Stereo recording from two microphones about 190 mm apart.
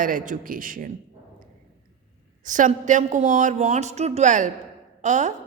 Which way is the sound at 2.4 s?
40° right (ahead or behind).